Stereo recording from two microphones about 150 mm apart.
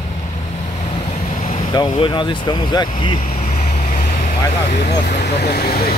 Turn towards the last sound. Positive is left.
turn(degrees=90)